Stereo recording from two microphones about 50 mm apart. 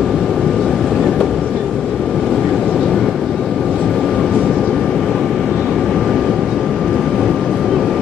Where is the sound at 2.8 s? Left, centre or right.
Centre.